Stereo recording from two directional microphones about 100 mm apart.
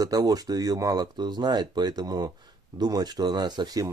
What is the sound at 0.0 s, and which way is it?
Speech, 40° right (ahead or behind).